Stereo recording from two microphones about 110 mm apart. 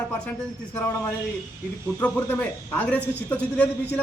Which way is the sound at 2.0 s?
15° left (ahead or behind).